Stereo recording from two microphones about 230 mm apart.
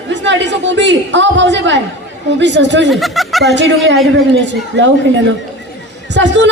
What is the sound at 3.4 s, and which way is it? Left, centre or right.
Speech, right.